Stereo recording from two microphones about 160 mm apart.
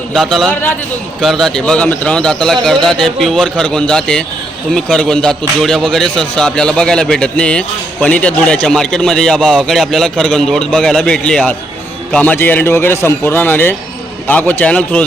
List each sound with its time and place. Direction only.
0.1 s a man's voice: centre (ahead or behind)